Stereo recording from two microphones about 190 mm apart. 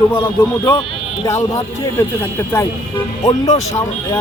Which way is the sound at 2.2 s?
10° left (ahead or behind).